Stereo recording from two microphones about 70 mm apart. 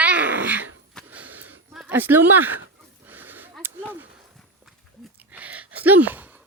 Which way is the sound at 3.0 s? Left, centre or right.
Right.